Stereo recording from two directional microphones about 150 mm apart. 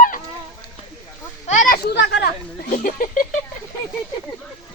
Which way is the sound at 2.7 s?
65° left (ahead or behind).